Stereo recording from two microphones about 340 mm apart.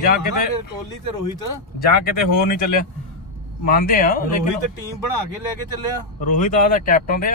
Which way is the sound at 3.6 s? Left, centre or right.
Left.